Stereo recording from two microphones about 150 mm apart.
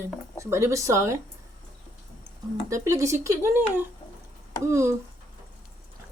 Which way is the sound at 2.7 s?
20° right (ahead or behind).